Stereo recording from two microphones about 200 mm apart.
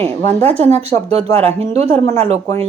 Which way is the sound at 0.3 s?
10° left (ahead or behind).